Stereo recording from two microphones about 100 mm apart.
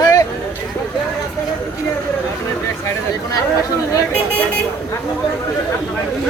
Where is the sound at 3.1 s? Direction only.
35° left (ahead or behind).